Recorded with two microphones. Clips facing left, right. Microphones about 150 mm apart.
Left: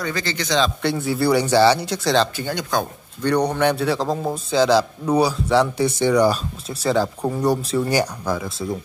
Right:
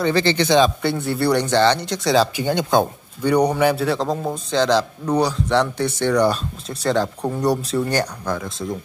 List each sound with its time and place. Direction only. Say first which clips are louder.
0.0 s speech: right 8 dB; 25° right (ahead or behind)
0.8 s a man's voice: even; centre (ahead or behind)
2.3 s speech: right 5 dB; 20° right (ahead or behind)
3.2 s a man's voice: right 2 dB; 10° right (ahead or behind); by 8.7 s 5° left (ahead or behind)